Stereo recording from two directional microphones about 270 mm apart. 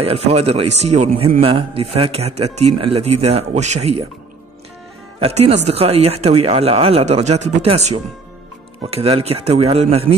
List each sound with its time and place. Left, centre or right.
0.0 s a man's voice: right
5.2 s a man's voice: right